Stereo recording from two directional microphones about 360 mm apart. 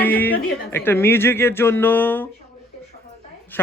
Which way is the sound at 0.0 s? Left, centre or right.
Centre.